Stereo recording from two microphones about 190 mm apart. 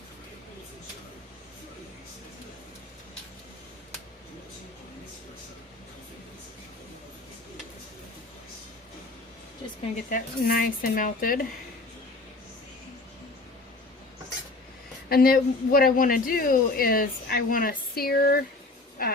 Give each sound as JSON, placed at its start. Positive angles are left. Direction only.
{"t": 9.8, "sound": "speech", "side_deg": 45}
{"t": 15.1, "sound": "speech", "side_deg": 50}